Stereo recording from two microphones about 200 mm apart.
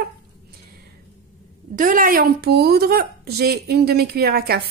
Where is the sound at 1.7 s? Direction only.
40° right (ahead or behind).